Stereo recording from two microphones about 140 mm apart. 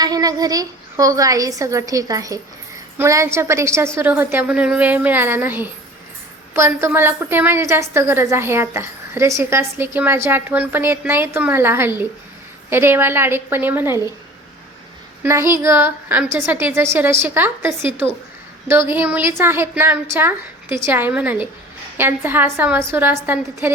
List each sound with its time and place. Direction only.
0.0 s a woman's voice: 25° right (ahead or behind)
15.2 s a woman's voice: 20° right (ahead or behind)